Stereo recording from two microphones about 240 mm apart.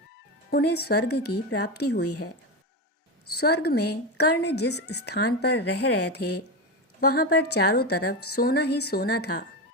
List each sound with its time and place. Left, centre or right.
0.5 s a woman's voice: left
3.3 s a woman's voice: left